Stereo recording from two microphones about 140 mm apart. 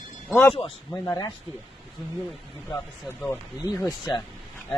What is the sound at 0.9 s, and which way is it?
Speech, 20° left (ahead or behind).